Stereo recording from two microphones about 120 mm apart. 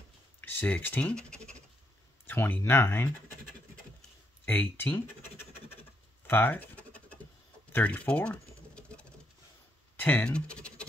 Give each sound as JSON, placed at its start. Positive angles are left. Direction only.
{"t": 0.4, "sound": "speech", "side_deg": 15}
{"t": 4.5, "sound": "scratch", "side_deg": 15}
{"t": 6.2, "sound": "pigeon", "side_deg": 15}
{"t": 7.7, "sound": "typing", "side_deg": 10}
{"t": 9.9, "sound": "scratch", "side_deg": 15}